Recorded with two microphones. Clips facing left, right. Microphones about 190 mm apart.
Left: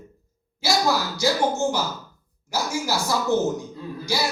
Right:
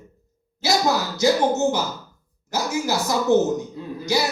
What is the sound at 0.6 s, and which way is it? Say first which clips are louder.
A man's voice: right 1 dB; 20° right (ahead or behind).